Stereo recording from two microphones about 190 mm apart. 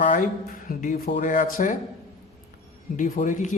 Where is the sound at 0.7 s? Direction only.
45° left (ahead or behind).